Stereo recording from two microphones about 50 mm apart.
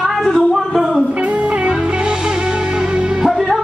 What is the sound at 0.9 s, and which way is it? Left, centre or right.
Music, centre.